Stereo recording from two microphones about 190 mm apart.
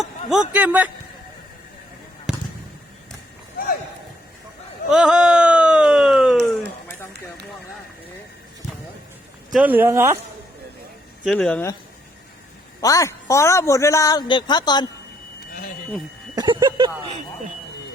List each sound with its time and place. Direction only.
0.0 s speech: centre (ahead or behind)
2.3 s basketball bounce: 5° right (ahead or behind)
4.9 s a sound: 5° right (ahead or behind)
9.5 s speech: 10° right (ahead or behind)
11.2 s speech: centre (ahead or behind)
12.8 s a man's voice: 15° left (ahead or behind)
16.3 s speech: 20° right (ahead or behind)